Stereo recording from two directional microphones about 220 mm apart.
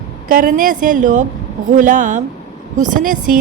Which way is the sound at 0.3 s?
40° right (ahead or behind).